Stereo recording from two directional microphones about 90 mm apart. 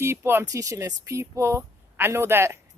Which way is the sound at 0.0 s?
25° right (ahead or behind).